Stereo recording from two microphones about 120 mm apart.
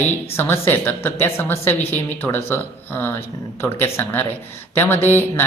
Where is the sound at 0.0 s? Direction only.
15° left (ahead or behind).